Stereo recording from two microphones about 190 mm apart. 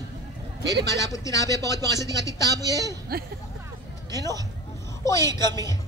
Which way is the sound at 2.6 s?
20° right (ahead or behind).